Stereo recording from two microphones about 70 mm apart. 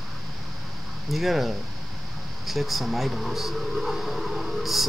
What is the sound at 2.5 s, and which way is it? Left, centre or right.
Speech, centre.